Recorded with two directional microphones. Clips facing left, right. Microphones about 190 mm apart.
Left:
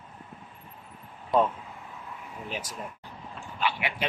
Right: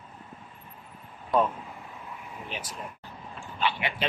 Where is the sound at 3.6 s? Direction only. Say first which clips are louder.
Right 1 dB; 10° left (ahead or behind).